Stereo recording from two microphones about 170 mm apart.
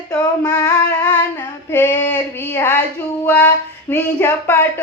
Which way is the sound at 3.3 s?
10° left (ahead or behind).